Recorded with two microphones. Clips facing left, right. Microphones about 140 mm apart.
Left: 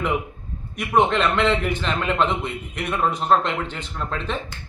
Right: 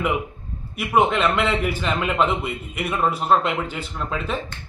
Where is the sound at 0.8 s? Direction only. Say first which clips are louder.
Even; 5° right (ahead or behind).